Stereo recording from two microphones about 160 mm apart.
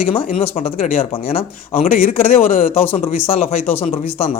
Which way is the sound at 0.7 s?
60° left (ahead or behind).